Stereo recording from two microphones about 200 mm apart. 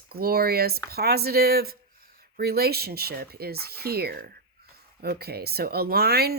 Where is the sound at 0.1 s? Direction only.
50° right (ahead or behind).